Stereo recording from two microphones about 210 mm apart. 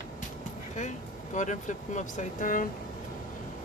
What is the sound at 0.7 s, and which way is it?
Speech, 35° left (ahead or behind).